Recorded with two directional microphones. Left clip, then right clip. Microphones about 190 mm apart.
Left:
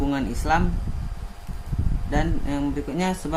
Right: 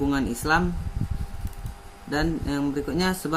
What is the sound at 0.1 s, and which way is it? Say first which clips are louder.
Speech: left 1 dB; 15° right (ahead or behind).